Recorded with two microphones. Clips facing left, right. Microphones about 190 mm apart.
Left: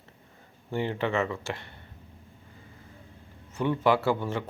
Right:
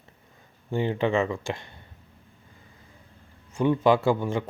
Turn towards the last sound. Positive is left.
turn(degrees=-15)  # may be behind; listen again after turning